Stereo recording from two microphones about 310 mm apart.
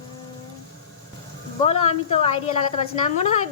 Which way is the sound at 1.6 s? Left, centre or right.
Left.